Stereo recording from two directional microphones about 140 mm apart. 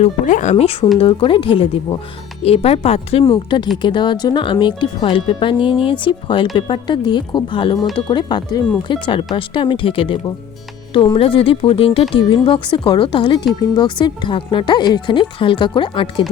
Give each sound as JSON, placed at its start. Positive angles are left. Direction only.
{"t": 0.0, "sound": "speech", "side_deg": 60}
{"t": 0.6, "sound": "speech", "side_deg": 45}
{"t": 3.3, "sound": "speech", "side_deg": 35}